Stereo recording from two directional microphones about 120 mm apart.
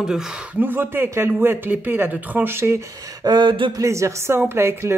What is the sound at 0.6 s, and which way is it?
Speech, 15° right (ahead or behind).